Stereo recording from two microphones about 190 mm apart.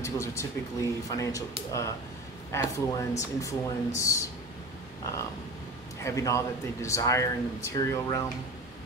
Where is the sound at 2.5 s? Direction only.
15° left (ahead or behind).